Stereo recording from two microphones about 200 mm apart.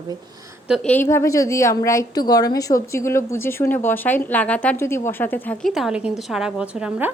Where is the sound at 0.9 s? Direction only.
10° left (ahead or behind); by 7.1 s 5° right (ahead or behind).